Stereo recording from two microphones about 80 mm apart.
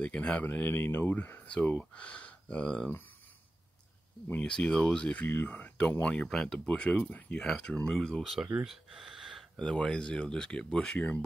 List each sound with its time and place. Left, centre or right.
0.0 s speech: centre
4.3 s speech: centre
6.0 s speech: centre
8.6 s a sound: centre
9.6 s speech: centre